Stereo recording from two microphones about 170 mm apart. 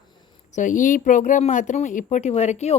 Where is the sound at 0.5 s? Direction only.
50° left (ahead or behind).